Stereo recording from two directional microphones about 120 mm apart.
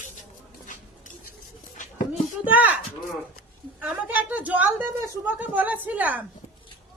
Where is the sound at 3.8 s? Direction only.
15° right (ahead or behind).